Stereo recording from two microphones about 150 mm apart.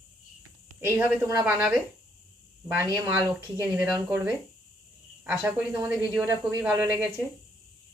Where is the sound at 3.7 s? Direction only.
5° right (ahead or behind).